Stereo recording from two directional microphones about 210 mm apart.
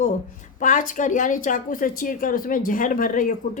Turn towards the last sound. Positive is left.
turn(degrees=40)  # may be behind; listen again after turning